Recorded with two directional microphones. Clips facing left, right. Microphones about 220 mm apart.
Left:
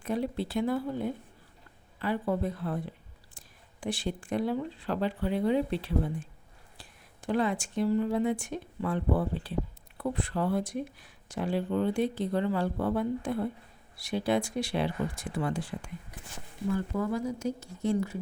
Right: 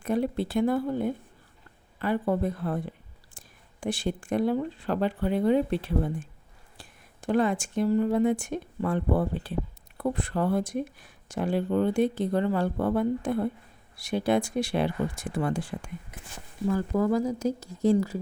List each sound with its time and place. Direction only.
0.0 s speech: 50° right (ahead or behind)
16.9 s speech: 40° right (ahead or behind)